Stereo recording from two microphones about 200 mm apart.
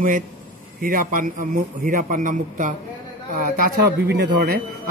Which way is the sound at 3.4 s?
50° right (ahead or behind).